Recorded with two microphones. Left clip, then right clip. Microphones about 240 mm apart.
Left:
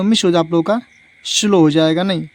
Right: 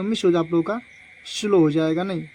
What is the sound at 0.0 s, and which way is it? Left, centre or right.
Speech, left.